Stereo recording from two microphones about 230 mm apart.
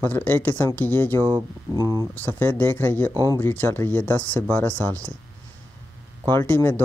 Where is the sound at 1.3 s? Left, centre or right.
Centre.